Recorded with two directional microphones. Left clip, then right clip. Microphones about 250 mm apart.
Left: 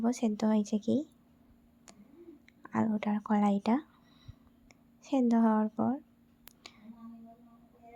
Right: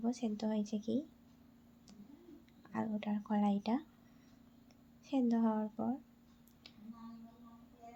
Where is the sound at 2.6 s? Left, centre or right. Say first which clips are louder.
Left 8 dB; left.